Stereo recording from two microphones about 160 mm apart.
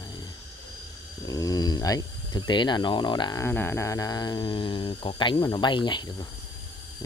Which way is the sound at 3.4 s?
15° left (ahead or behind).